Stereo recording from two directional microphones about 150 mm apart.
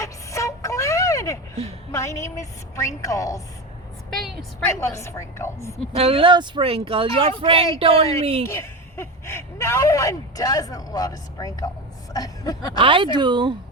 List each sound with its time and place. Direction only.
0.0 s vehicle: 20° left (ahead or behind)
1.9 s speech: 20° left (ahead or behind)
4.1 s a woman's voice: centre (ahead or behind)
4.7 s speech: 20° left (ahead or behind)
5.9 s speech: 40° right (ahead or behind)
8.4 s speech: 15° left (ahead or behind)
12.7 s speech: 35° right (ahead or behind)